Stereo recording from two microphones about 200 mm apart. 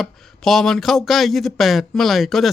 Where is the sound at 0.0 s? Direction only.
Centre (ahead or behind).